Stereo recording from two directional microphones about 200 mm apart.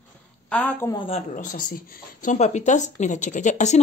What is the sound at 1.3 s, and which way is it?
Speech, 40° left (ahead or behind).